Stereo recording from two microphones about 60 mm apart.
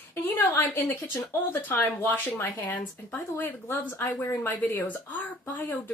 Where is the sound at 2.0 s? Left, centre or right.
Left.